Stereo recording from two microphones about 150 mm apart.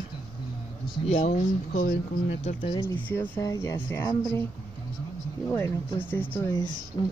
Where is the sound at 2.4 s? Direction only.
50° left (ahead or behind).